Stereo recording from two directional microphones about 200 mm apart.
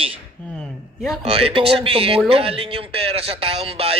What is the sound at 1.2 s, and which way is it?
A man's voice, 30° right (ahead or behind).